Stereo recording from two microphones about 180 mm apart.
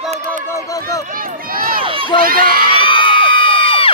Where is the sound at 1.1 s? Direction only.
50° right (ahead or behind).